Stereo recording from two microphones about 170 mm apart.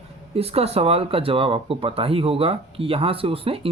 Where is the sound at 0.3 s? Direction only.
35° right (ahead or behind).